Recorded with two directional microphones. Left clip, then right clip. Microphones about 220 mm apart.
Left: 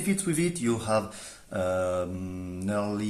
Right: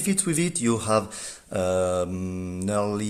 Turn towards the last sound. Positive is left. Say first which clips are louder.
# right 4 dB
turn(degrees=-45)  # may be behind; listen again after turning